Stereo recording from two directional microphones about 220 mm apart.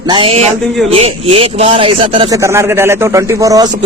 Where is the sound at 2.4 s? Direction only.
10° right (ahead or behind).